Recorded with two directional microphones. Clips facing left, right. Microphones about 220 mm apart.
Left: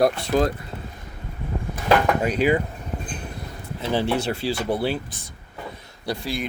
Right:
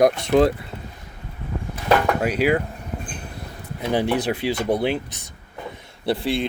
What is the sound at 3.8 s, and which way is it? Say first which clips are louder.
Speech: right 2 dB; 15° right (ahead or behind).